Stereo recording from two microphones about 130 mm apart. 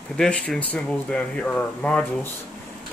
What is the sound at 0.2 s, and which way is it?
Speech, 5° left (ahead or behind).